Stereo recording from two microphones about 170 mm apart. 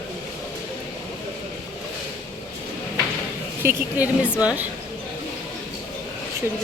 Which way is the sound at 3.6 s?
10° right (ahead or behind).